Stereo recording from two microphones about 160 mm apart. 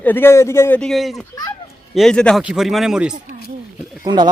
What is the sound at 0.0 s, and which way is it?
Speech, 15° left (ahead or behind).